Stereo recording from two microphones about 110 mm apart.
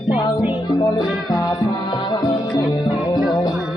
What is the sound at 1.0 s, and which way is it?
Music, centre (ahead or behind).